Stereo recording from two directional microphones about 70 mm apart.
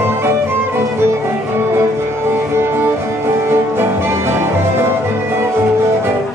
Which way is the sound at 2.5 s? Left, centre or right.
Right.